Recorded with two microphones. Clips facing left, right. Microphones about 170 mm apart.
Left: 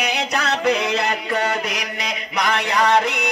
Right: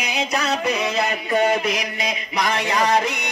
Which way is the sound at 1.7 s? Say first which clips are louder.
Right 2 dB; 70° left (ahead or behind).